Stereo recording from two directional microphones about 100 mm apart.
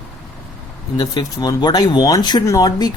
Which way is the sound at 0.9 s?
40° left (ahead or behind).